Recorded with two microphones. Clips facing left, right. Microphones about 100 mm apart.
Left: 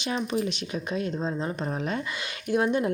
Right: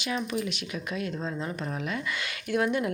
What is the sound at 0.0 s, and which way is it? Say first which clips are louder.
Speech: left 3 dB; 30° left (ahead or behind).